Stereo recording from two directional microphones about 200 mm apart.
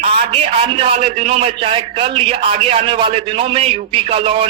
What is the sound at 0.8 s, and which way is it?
A man's voice, 30° right (ahead or behind).